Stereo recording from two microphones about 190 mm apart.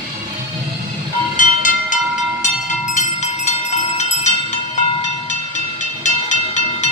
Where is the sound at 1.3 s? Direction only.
45° left (ahead or behind).